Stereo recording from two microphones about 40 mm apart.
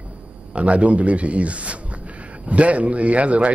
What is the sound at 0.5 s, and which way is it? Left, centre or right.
A man's voice, right.